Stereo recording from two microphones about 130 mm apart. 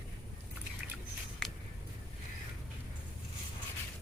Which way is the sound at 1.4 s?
5° left (ahead or behind).